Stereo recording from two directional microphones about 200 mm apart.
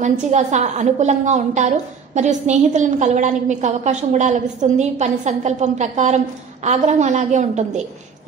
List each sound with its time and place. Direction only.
0.0 s a woman's voice: 35° right (ahead or behind)